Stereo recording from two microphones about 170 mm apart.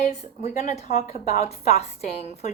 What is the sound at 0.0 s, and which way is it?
Speech, 40° left (ahead or behind).